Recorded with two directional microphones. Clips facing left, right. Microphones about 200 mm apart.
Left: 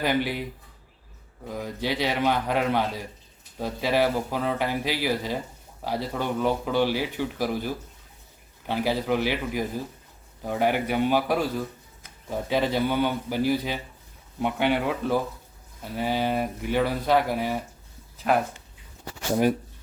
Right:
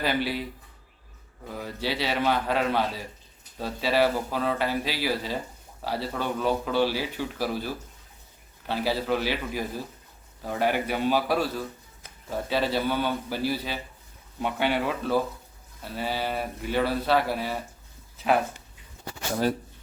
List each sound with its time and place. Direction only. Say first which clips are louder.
0.0 s speech: left 2 dB; 15° left (ahead or behind)
1.5 s speech: left 2 dB; 15° left (ahead or behind)
18.3 s speech: even; centre (ahead or behind)
19.3 s speech: left 4 dB; 15° left (ahead or behind)